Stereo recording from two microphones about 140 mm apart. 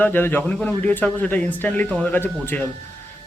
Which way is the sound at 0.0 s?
15° left (ahead or behind).